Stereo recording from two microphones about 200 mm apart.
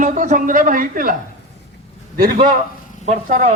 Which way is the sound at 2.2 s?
45° right (ahead or behind).